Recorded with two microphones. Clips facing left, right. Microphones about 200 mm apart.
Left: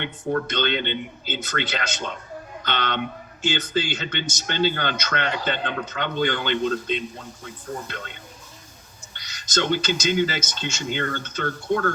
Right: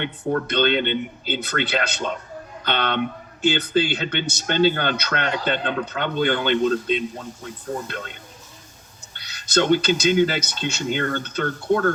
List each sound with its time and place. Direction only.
0.0 s a man's voice: 55° right (ahead or behind)
9.6 s speech: 55° right (ahead or behind)